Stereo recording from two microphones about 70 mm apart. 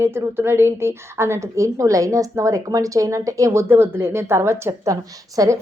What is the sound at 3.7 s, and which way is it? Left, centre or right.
A woman's voice, right.